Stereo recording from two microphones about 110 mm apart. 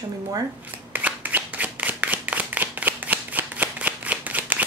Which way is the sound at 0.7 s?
15° right (ahead or behind).